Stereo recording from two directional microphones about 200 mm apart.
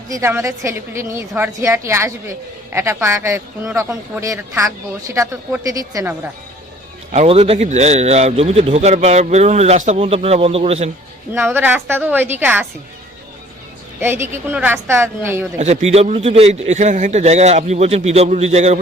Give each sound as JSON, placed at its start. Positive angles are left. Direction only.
{"t": 0.1, "sound": "speech", "side_deg": -15}
{"t": 7.1, "sound": "a man's voice", "side_deg": -30}
{"t": 11.3, "sound": "speech", "side_deg": -10}
{"t": 14.0, "sound": "speech", "side_deg": -10}
{"t": 15.5, "sound": "a man's voice", "side_deg": -35}